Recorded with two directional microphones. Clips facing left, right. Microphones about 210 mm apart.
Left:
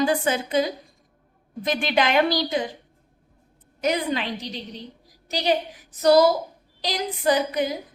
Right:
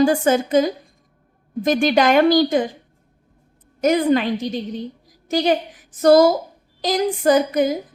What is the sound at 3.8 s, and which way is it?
A woman's voice, 45° right (ahead or behind).